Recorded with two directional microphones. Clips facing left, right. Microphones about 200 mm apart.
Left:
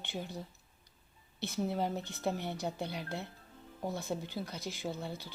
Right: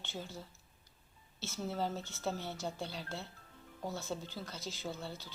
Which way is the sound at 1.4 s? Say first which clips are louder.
Left 4 dB; 15° left (ahead or behind).